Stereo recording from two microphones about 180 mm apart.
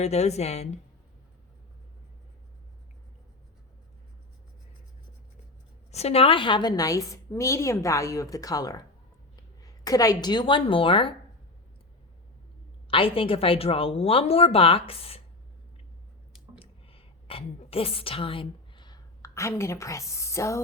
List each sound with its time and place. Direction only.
0.0 s speech: 35° left (ahead or behind)
5.9 s a woman's voice: 35° left (ahead or behind)
12.9 s speech: 30° left (ahead or behind)
16.6 s a sound: 30° left (ahead or behind)